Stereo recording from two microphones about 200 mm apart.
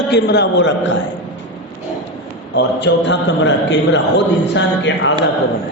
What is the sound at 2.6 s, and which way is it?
A man's voice, 60° left (ahead or behind).